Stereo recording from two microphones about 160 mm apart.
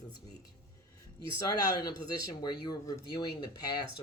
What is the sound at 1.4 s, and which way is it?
Speech, 20° left (ahead or behind).